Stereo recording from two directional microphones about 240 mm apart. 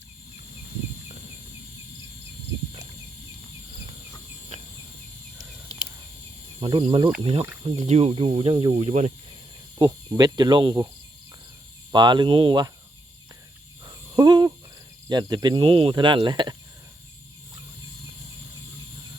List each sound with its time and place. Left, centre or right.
6.6 s speech: right
9.7 s cricket: centre
11.9 s cricket: centre
13.8 s a sound: centre
15.1 s speech: centre